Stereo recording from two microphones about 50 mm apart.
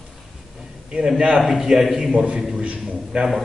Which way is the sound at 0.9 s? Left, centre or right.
Centre.